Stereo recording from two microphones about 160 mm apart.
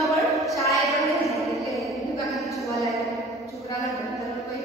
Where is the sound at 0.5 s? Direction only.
20° left (ahead or behind).